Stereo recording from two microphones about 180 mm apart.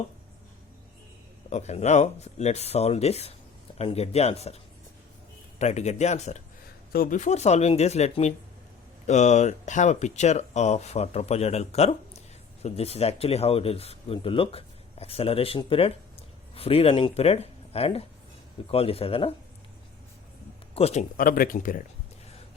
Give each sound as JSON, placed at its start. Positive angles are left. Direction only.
{"t": 1.5, "sound": "speech", "side_deg": 40}
{"t": 5.5, "sound": "speech", "side_deg": 40}
{"t": 6.9, "sound": "speech", "side_deg": 50}
{"t": 20.7, "sound": "speech", "side_deg": 35}
{"t": 21.2, "sound": "speech", "side_deg": 50}